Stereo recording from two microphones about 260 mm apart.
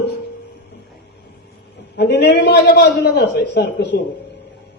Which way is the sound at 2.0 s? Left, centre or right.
Left.